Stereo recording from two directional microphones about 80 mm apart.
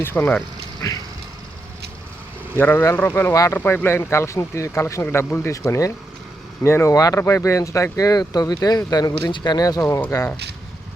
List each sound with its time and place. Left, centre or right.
0.0 s speech: left
0.8 s speech: left
2.6 s speech: left
3.3 s speech: left
3.6 s speech: left
5.0 s speech: left
6.6 s speech: left
6.9 s speech: left